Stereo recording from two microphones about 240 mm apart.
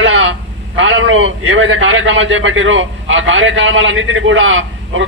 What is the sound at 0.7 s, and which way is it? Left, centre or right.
A man's voice, right.